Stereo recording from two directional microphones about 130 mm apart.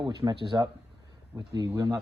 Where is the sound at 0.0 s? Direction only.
35° right (ahead or behind).